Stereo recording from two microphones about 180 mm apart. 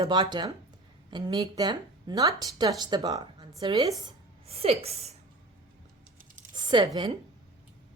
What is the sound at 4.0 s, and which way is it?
Speech, 35° right (ahead or behind).